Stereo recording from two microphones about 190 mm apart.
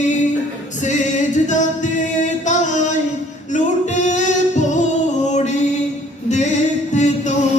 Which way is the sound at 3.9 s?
40° left (ahead or behind).